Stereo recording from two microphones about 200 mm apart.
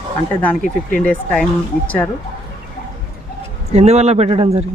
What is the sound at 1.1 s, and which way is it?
Speech, 5° left (ahead or behind).